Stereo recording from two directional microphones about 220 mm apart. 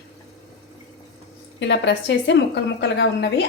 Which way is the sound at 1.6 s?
55° left (ahead or behind).